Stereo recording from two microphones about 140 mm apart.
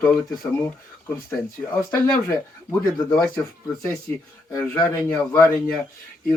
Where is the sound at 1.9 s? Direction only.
20° left (ahead or behind).